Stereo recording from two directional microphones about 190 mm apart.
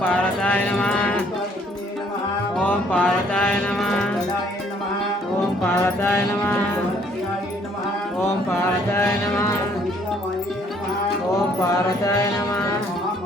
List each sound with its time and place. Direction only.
0.0 s speech: 10° left (ahead or behind)
2.6 s music: 10° left (ahead or behind)
5.6 s mantra: 10° left (ahead or behind)
11.7 s mantra: 15° left (ahead or behind)